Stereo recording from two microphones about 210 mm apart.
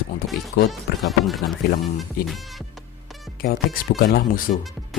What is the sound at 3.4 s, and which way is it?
Speech, 45° left (ahead or behind).